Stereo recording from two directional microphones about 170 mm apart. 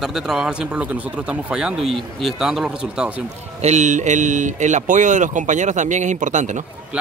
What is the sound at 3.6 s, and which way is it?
Speech, 45° right (ahead or behind).